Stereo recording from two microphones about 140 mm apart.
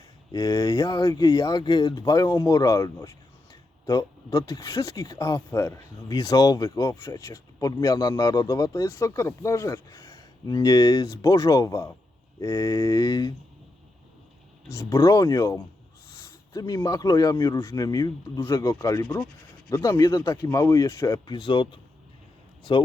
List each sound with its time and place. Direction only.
0.3 s speech: 25° left (ahead or behind)
14.8 s speech: 25° left (ahead or behind)